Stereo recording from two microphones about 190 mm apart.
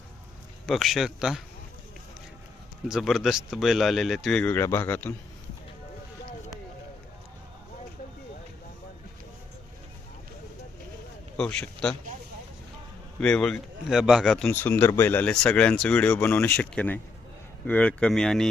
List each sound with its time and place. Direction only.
0.6 s speech: centre (ahead or behind)
2.9 s speech: centre (ahead or behind)
11.3 s a man's voice: 5° left (ahead or behind)
13.1 s speech: 5° left (ahead or behind)